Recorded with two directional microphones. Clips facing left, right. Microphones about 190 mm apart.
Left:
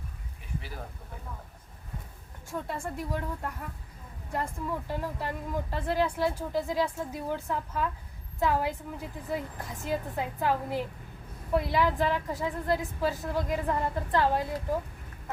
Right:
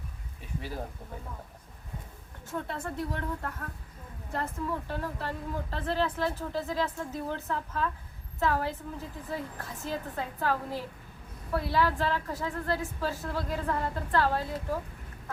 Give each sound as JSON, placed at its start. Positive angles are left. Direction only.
{"t": 2.5, "sound": "a woman's voice", "side_deg": 10}